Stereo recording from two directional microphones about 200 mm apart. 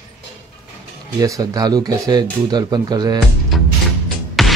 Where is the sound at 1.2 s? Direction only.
15° right (ahead or behind).